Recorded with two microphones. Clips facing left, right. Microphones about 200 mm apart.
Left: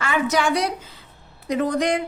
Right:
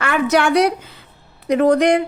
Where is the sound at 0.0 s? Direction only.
65° right (ahead or behind).